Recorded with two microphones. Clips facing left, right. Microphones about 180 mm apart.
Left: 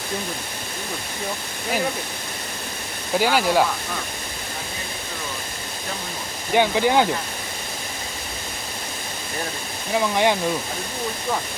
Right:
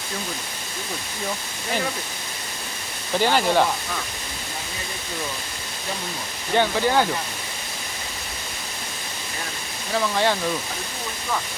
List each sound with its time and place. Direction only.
3.2 s speech: 10° left (ahead or behind)
6.5 s speech: 15° left (ahead or behind)
9.9 s speech: 15° left (ahead or behind)